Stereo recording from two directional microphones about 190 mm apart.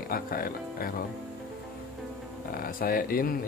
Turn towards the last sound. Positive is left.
turn(degrees=50)  # may be behind; listen again after turning